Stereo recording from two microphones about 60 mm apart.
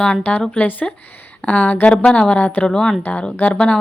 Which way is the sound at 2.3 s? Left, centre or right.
Left.